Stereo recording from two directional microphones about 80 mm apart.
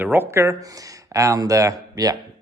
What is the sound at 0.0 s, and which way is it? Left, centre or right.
Speech, right.